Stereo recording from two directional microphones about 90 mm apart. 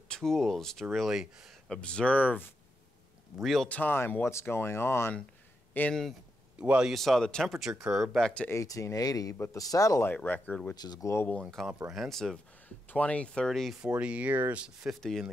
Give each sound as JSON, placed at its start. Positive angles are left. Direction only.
{"t": 0.1, "sound": "speech", "side_deg": 5}
{"t": 1.7, "sound": "speech", "side_deg": 10}
{"t": 3.3, "sound": "speech", "side_deg": -5}
{"t": 3.6, "sound": "speech", "side_deg": 20}
{"t": 6.6, "sound": "speech", "side_deg": -10}
{"t": 6.9, "sound": "speech", "side_deg": 0}
{"t": 8.5, "sound": "speech", "side_deg": 35}
{"t": 10.0, "sound": "speech", "side_deg": 20}
{"t": 10.7, "sound": "speech", "side_deg": 45}
{"t": 11.6, "sound": "speech", "side_deg": 5}
{"t": 12.6, "sound": "speech", "side_deg": 15}
{"t": 13.7, "sound": "speech", "side_deg": -15}
{"t": 15.0, "sound": "speech", "side_deg": 5}